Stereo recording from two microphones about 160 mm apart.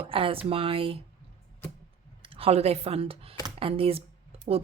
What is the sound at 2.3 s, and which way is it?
A woman's voice, 40° right (ahead or behind).